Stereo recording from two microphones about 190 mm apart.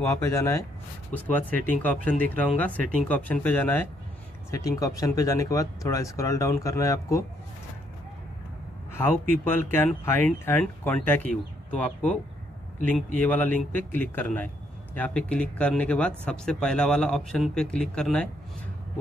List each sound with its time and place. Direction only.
0.0 s speech: 15° left (ahead or behind)
8.9 s speech: 10° left (ahead or behind)
13.2 s speech: 10° left (ahead or behind)